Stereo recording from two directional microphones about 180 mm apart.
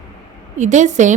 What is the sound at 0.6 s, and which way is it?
Speech, 40° right (ahead or behind).